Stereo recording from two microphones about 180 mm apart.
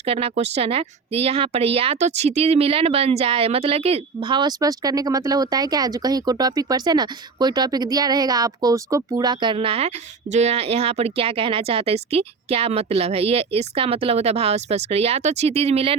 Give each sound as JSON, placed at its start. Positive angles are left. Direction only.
{"t": 0.0, "sound": "speech", "side_deg": -35}